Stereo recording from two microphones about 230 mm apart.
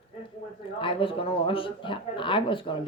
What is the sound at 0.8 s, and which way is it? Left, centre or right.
Speech, left.